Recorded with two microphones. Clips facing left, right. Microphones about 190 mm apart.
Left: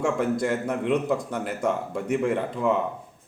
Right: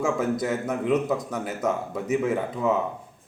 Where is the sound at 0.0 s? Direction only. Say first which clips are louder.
Left 1 dB; 5° right (ahead or behind).